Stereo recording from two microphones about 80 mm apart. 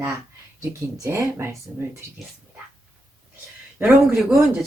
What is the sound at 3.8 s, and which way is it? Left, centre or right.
Speech, centre.